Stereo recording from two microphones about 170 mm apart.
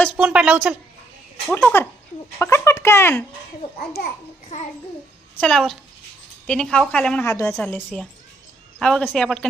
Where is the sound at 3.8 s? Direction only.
65° left (ahead or behind).